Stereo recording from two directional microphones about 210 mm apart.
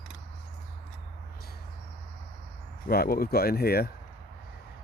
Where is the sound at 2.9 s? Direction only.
45° left (ahead or behind).